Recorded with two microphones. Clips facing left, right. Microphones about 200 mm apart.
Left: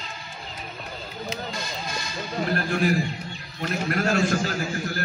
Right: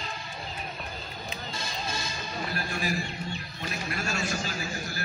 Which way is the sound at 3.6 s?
60° left (ahead or behind).